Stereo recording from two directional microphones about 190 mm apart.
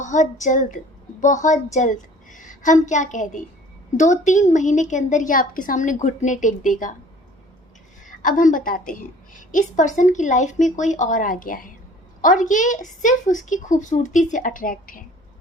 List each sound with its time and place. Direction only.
0.0 s a woman's voice: 40° left (ahead or behind)
8.0 s a woman's voice: 45° left (ahead or behind)